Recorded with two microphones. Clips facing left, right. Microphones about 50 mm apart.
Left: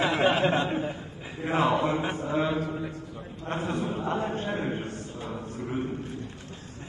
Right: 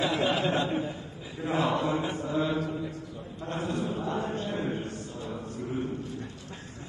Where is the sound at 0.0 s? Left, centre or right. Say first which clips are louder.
Left 3 dB; left.